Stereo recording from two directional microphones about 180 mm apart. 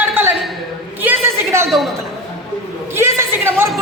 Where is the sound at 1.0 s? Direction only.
15° right (ahead or behind).